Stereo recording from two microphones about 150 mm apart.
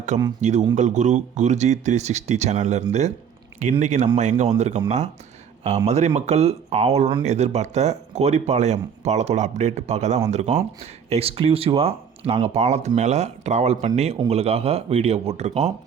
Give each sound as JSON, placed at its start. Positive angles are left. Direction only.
{"t": 0.1, "sound": "speech", "side_deg": -50}